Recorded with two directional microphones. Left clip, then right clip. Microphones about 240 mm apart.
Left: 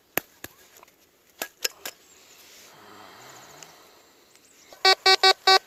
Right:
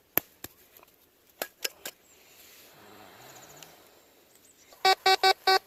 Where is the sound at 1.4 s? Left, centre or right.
Centre.